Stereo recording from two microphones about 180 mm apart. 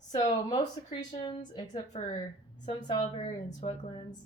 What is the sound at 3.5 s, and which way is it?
Speech, 45° left (ahead or behind).